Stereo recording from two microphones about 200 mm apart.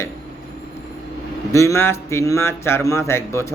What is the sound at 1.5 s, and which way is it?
Speech, 15° left (ahead or behind).